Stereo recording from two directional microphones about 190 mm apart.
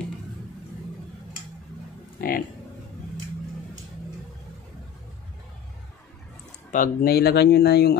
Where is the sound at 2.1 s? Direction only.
50° left (ahead or behind).